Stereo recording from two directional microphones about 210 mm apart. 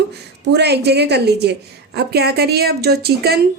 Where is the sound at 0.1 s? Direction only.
55° right (ahead or behind).